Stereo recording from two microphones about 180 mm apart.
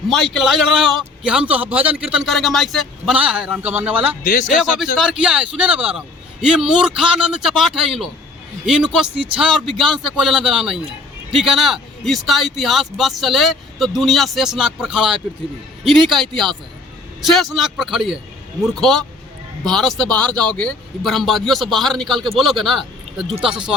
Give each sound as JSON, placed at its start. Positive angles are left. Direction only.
{"t": 0.1, "sound": "a man's voice", "side_deg": 0}
{"t": 4.2, "sound": "a man's voice", "side_deg": 45}
{"t": 4.9, "sound": "a man's voice", "side_deg": -5}